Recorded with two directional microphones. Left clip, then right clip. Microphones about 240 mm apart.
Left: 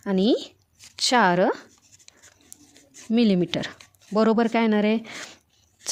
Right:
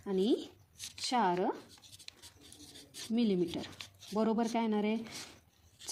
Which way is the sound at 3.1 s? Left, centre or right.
Left.